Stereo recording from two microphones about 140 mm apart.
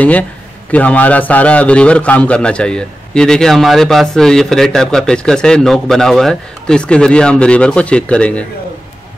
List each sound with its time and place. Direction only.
0.7 s a man's voice: 10° left (ahead or behind)